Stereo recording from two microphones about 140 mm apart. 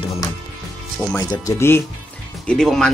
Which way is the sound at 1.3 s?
20° left (ahead or behind).